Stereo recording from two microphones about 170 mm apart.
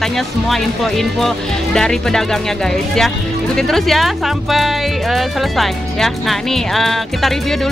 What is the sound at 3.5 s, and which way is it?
Speech, centre (ahead or behind).